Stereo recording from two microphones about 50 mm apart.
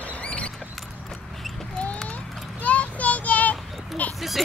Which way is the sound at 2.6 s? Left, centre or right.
Left.